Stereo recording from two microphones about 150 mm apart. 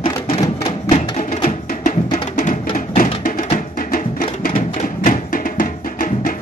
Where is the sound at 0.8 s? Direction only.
55° left (ahead or behind).